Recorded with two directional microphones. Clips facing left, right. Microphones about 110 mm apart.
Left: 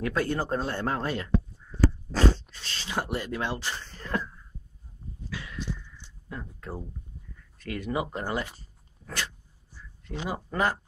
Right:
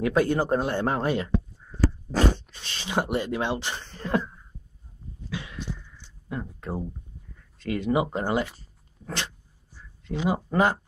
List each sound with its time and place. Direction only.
0.0 s speech: 15° right (ahead or behind)
5.3 s a sound: 20° right (ahead or behind)
7.5 s speech: 25° right (ahead or behind)
9.0 s dog: 25° right (ahead or behind)
10.2 s speech: 20° right (ahead or behind)